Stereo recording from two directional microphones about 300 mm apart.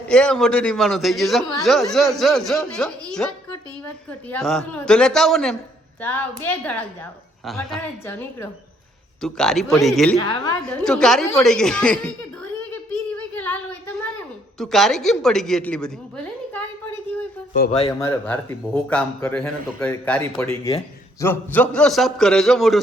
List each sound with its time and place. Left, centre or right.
0.1 s a woman's voice: centre
10.2 s a woman's voice: centre
10.6 s speech: centre
13.3 s child singing: centre
14.6 s a woman's voice: centre
17.5 s speech: left
18.0 s speech: centre